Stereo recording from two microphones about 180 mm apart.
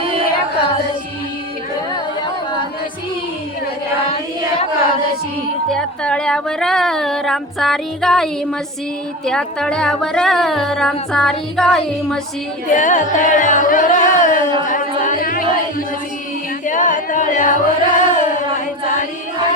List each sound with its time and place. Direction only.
5.7 s speech: 5° left (ahead or behind)
12.7 s music: 45° left (ahead or behind)
14.7 s singing: 45° left (ahead or behind)
16.6 s music: 45° left (ahead or behind)